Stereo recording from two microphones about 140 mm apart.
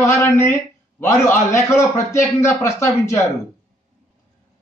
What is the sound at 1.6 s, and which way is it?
A man's voice, 20° left (ahead or behind).